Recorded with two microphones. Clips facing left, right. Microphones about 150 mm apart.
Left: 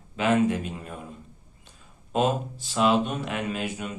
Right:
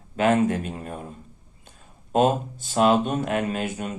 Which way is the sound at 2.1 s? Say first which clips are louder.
Right 4 dB; 45° right (ahead or behind).